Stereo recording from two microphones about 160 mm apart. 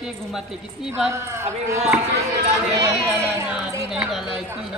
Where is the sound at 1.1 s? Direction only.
15° right (ahead or behind).